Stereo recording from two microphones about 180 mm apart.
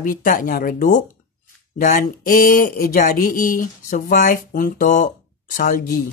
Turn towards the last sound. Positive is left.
turn(degrees=50)  # may be behind; listen again after turning